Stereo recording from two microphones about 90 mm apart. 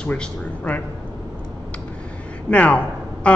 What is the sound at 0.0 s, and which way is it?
Speech, 10° left (ahead or behind).